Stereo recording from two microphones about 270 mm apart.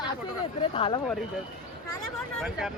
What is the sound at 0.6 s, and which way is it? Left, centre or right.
Speech, centre.